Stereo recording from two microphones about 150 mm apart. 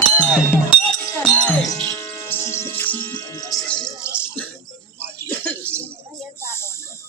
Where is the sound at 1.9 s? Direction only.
15° left (ahead or behind).